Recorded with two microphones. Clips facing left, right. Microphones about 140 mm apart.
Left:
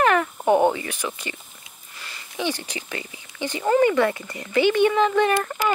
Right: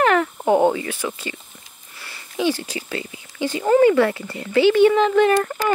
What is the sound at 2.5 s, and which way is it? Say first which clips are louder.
Speech: right 4 dB; 15° left (ahead or behind).